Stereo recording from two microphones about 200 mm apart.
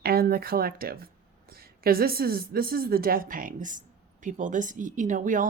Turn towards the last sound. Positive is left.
turn(degrees=-40)  # may be behind; listen again after turning